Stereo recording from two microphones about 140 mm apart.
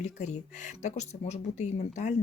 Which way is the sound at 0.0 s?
55° left (ahead or behind).